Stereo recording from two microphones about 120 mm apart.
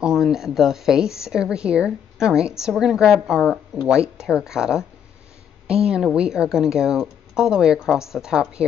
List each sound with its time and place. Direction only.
0.0 s speech: 5° right (ahead or behind)